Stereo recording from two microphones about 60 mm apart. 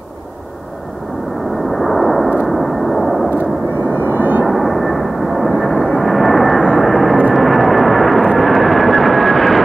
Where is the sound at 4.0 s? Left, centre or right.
Right.